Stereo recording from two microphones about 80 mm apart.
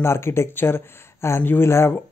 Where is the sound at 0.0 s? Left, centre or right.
Left.